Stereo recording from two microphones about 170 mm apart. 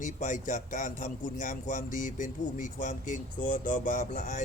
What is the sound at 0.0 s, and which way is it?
A man's voice, 50° left (ahead or behind).